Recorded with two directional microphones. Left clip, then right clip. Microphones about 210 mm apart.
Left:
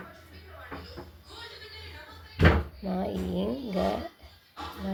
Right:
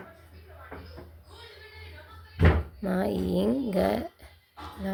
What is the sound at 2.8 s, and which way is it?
Speech, 35° right (ahead or behind).